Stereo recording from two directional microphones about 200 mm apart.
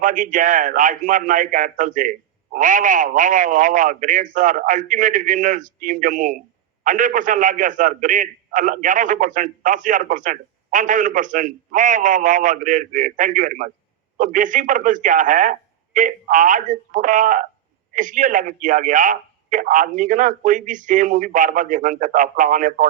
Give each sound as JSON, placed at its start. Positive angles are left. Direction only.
{"t": 0.0, "sound": "a man's voice", "side_deg": -40}